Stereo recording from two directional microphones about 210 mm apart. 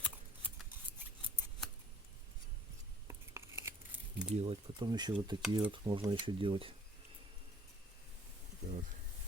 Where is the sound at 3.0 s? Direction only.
15° right (ahead or behind).